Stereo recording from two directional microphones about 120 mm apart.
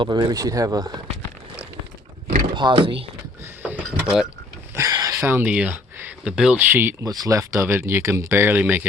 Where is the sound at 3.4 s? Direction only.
15° right (ahead or behind).